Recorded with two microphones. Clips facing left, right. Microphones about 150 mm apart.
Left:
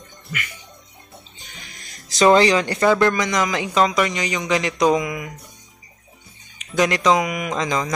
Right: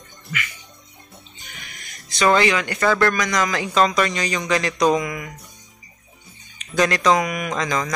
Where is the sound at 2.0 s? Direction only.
30° left (ahead or behind).